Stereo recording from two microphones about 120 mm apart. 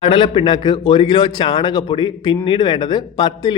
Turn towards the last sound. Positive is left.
turn(degrees=35)  # may be behind; listen again after turning